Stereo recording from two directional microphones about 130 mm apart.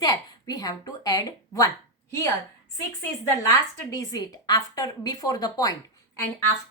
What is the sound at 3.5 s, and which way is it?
A woman's voice, 30° left (ahead or behind).